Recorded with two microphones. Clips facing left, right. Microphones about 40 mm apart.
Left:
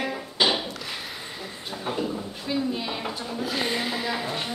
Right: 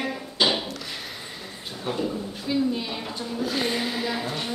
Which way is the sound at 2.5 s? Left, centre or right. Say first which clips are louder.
Right 2 dB; centre.